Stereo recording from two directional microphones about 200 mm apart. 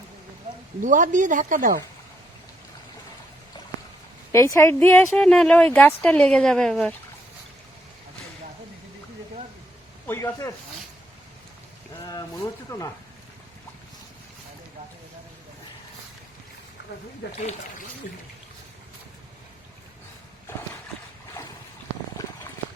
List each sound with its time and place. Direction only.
0.8 s a woman's voice: 40° right (ahead or behind)
4.3 s a woman's voice: 15° left (ahead or behind)
10.1 s speech: 15° left (ahead or behind)
12.0 s speech: 15° left (ahead or behind)